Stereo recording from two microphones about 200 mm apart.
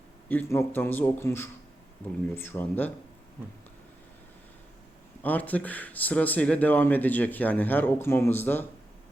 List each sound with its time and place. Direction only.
0.3 s speech: 10° left (ahead or behind)
5.2 s speech: 10° left (ahead or behind)